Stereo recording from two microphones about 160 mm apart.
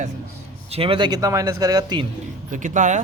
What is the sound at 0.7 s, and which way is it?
Speech, 35° right (ahead or behind).